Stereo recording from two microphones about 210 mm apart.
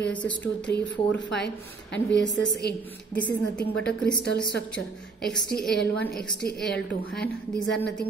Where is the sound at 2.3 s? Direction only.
60° left (ahead or behind).